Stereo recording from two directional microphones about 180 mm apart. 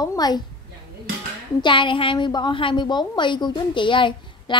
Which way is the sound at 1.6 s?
25° left (ahead or behind).